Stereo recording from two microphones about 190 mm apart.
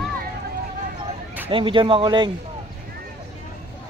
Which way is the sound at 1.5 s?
25° right (ahead or behind).